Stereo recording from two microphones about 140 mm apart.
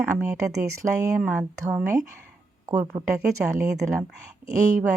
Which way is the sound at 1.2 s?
5° right (ahead or behind).